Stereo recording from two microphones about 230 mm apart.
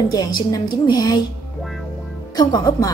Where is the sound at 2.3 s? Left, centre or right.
Centre.